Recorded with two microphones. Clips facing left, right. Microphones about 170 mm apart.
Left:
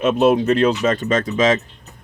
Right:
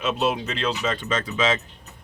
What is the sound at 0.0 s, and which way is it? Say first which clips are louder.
Speech: left 9 dB; 50° left (ahead or behind).